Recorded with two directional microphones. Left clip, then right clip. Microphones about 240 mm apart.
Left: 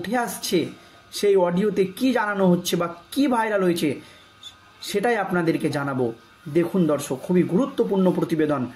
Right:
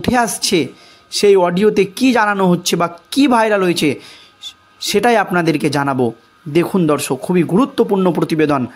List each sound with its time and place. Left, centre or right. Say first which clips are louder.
0.0 s speech: right 10 dB; right